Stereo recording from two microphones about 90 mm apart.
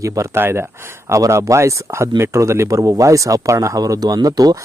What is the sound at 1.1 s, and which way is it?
Speech, 35° right (ahead or behind).